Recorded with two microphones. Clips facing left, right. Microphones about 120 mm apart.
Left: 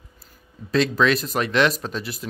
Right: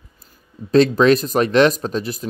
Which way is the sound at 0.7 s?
45° right (ahead or behind).